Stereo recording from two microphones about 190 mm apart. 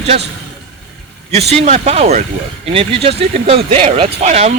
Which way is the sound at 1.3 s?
35° right (ahead or behind).